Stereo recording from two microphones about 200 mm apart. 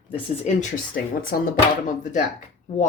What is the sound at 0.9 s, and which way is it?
Speech, 45° left (ahead or behind).